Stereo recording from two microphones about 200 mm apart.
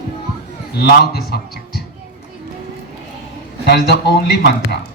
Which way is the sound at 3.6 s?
55° left (ahead or behind).